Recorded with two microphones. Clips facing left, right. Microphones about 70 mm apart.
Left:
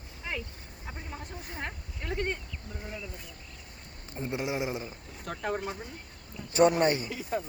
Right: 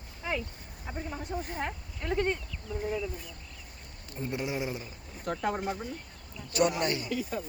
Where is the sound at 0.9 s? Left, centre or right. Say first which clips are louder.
Right 5 dB; centre.